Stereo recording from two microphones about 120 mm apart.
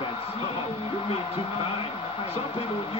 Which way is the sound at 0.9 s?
55° left (ahead or behind).